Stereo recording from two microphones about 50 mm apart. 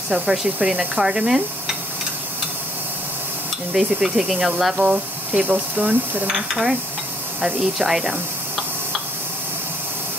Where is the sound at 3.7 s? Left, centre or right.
Centre.